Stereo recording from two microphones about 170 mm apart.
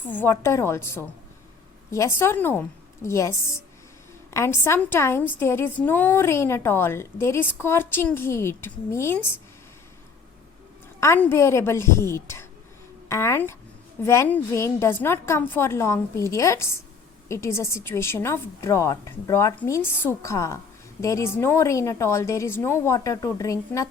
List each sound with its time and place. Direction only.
0.1 s a woman's voice: 15° left (ahead or behind)
11.0 s a woman's voice: 15° left (ahead or behind)